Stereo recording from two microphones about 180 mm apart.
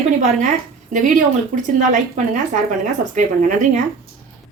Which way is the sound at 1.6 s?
45° right (ahead or behind).